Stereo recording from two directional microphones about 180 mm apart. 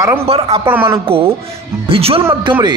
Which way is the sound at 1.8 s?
30° right (ahead or behind).